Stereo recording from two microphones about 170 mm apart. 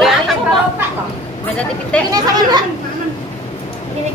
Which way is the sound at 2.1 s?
20° right (ahead or behind).